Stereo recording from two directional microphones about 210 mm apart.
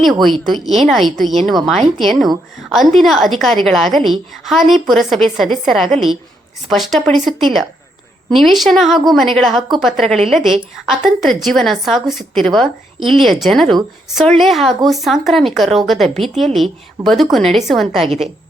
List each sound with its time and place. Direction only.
0.0 s a woman's voice: centre (ahead or behind)